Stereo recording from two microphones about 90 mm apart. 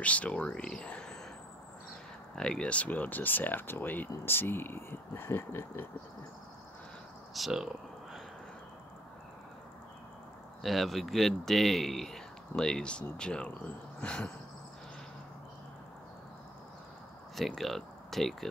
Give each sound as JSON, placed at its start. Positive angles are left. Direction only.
{"t": 0.0, "sound": "speech", "side_deg": 15}
{"t": 2.3, "sound": "speech", "side_deg": 10}
{"t": 7.3, "sound": "a sound", "side_deg": -5}
{"t": 10.6, "sound": "speech", "side_deg": 0}
{"t": 17.4, "sound": "speech", "side_deg": 0}